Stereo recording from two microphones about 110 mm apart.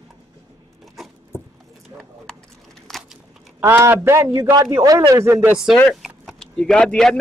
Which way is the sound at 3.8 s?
25° right (ahead or behind).